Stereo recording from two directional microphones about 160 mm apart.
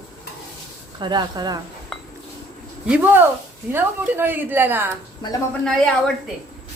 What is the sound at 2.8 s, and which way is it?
A woman's voice, 10° right (ahead or behind).